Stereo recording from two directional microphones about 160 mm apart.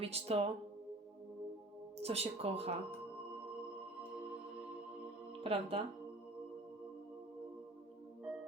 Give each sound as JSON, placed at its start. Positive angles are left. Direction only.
{"t": 0.0, "sound": "speech", "side_deg": -40}
{"t": 2.0, "sound": "speech", "side_deg": -40}
{"t": 5.4, "sound": "speech", "side_deg": -35}